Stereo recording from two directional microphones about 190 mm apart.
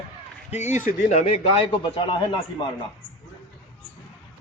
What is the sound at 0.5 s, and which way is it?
Speech, 35° left (ahead or behind).